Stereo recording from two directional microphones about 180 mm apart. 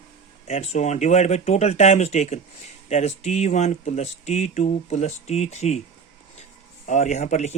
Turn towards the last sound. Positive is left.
turn(degrees=40)  # may be behind; listen again after turning